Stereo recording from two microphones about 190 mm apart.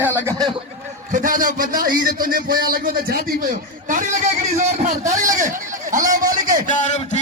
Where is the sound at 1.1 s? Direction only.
45° right (ahead or behind).